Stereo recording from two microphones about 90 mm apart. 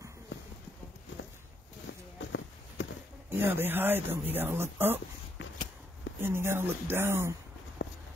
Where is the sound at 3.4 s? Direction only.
25° right (ahead or behind).